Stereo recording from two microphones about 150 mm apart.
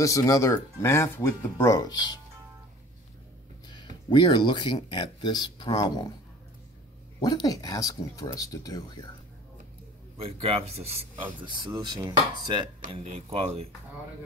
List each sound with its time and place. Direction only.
0.0 s speech: 20° left (ahead or behind)
3.6 s speech: 30° left (ahead or behind)
7.2 s speech: 25° left (ahead or behind)
10.1 s speech: 40° right (ahead or behind)
11.4 s speech: 30° right (ahead or behind)
12.9 s speech: 40° right (ahead or behind)